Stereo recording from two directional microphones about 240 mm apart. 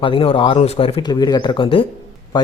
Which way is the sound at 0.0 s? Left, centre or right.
Left.